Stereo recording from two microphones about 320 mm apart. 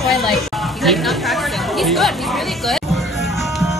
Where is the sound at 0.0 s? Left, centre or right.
Centre.